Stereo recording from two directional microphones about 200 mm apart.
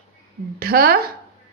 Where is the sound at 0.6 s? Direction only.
50° right (ahead or behind).